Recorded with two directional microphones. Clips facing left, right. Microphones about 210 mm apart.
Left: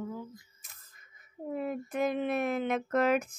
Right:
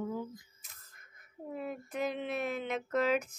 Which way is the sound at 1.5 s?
55° left (ahead or behind).